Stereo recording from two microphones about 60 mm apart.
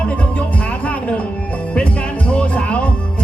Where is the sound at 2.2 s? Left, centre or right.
Left.